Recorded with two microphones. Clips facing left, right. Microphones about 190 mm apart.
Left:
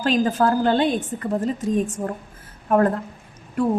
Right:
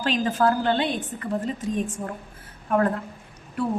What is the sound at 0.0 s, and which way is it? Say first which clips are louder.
A woman's voice: left 3 dB; 40° left (ahead or behind).